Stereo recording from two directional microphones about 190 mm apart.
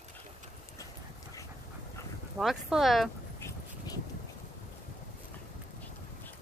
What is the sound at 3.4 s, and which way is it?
Dog, 20° left (ahead or behind).